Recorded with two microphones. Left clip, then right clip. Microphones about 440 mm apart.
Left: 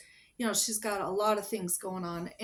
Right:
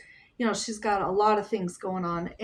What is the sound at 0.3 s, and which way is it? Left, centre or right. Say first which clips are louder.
Speech: right 3 dB; left.